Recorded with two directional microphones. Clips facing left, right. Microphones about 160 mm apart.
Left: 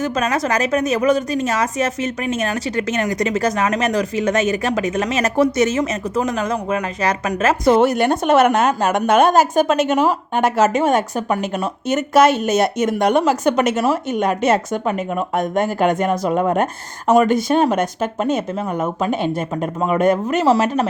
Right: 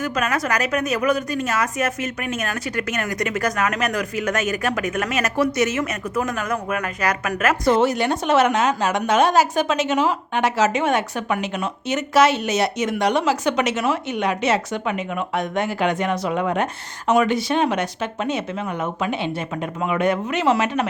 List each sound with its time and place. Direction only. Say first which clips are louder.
0.0 s a woman's voice: left 3 dB; 25° left (ahead or behind)
7.8 s a woman's voice: left 4 dB; 55° left (ahead or behind); by 20.8 s 35° left (ahead or behind)